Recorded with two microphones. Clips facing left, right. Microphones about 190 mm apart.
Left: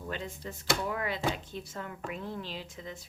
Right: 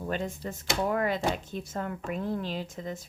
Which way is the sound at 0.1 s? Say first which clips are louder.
Right 6 dB; 45° right (ahead or behind).